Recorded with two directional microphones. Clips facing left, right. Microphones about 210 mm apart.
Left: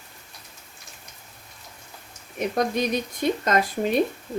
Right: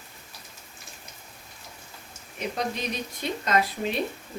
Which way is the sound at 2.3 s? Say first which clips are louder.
Left 7 dB; 50° left (ahead or behind).